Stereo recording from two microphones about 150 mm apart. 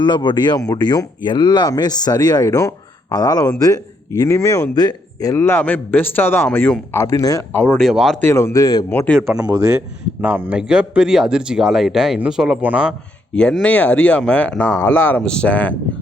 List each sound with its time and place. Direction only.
0.0 s a man's voice: 30° left (ahead or behind)
7.5 s speech: 10° left (ahead or behind)
8.2 s a man's voice: 15° left (ahead or behind)
9.0 s speech: 5° left (ahead or behind)
13.3 s a man's voice: 5° left (ahead or behind)